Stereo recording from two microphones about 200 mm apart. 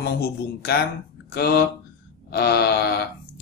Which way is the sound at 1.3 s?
50° left (ahead or behind).